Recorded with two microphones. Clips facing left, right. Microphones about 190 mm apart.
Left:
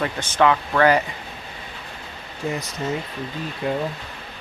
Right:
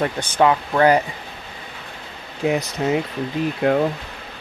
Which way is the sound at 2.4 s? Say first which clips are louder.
Right 6 dB; 70° right (ahead or behind).